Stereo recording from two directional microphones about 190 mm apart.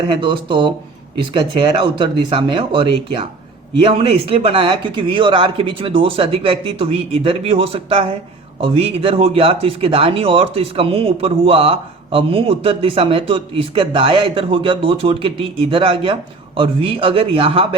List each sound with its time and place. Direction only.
0.1 s speech: 25° right (ahead or behind)